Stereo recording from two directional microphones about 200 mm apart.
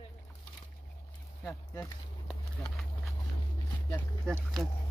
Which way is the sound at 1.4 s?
15° left (ahead or behind).